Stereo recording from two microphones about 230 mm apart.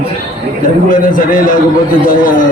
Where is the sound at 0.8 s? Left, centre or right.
Left.